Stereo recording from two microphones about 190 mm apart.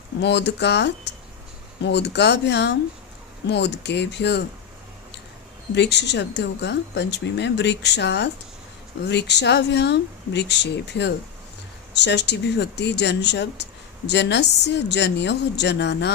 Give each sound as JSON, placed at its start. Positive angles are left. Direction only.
{"t": 0.2, "sound": "speech", "side_deg": 65}
{"t": 5.7, "sound": "speech", "side_deg": 65}